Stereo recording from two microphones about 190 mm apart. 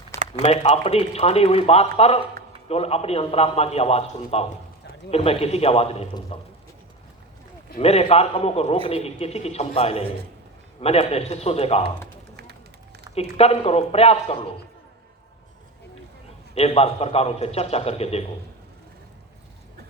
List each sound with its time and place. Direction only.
0.4 s a man's voice: 30° left (ahead or behind)
7.8 s a man's voice: 35° left (ahead or behind)
13.1 s a man's voice: 30° left (ahead or behind)
16.6 s a man's voice: 30° left (ahead or behind)